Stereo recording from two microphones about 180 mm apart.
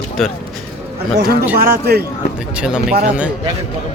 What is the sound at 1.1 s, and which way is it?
Speech, 60° right (ahead or behind).